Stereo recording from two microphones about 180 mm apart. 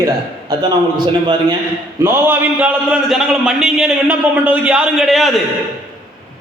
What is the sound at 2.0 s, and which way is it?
A man's voice, 10° right (ahead or behind).